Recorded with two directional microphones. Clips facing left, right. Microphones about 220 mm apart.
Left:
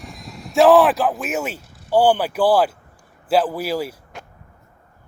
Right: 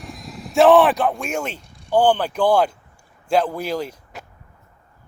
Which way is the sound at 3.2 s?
5° left (ahead or behind).